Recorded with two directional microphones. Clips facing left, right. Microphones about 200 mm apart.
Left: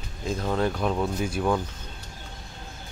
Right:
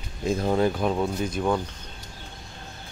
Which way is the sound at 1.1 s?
10° left (ahead or behind).